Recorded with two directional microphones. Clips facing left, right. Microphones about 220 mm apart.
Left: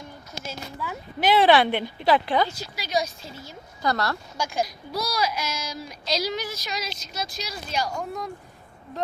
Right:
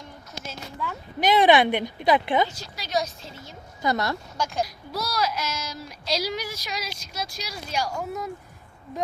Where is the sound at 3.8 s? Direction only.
20° right (ahead or behind).